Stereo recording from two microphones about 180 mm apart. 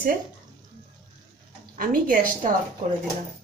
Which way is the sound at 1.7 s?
50° right (ahead or behind).